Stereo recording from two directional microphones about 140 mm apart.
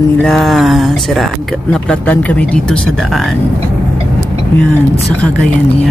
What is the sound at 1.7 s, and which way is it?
Speech, 10° left (ahead or behind).